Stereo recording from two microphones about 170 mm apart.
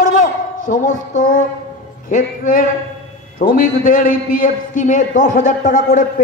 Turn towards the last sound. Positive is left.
turn(degrees=45)  # may be behind; listen again after turning